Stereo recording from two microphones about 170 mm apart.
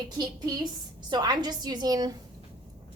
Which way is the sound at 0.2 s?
25° right (ahead or behind).